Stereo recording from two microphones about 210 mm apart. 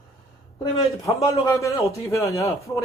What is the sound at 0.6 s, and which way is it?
A man's voice, 15° left (ahead or behind).